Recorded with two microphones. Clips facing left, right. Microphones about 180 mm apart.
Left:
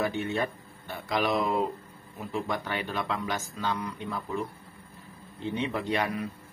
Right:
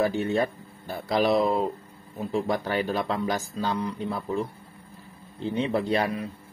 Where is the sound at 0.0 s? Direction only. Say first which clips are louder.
Right 5 dB; 35° right (ahead or behind).